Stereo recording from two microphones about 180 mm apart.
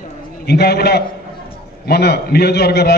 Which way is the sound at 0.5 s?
65° left (ahead or behind).